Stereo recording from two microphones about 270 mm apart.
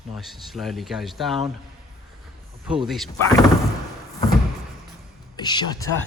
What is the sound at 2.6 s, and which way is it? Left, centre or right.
Speech, centre.